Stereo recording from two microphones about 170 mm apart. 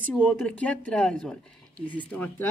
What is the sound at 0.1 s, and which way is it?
A woman's voice, 10° left (ahead or behind).